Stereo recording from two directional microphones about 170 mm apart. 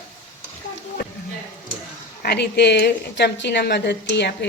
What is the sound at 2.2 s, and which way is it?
A woman's voice, 75° left (ahead or behind).